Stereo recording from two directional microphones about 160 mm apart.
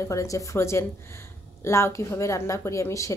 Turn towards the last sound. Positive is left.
turn(degrees=20)  # may be behind; listen again after turning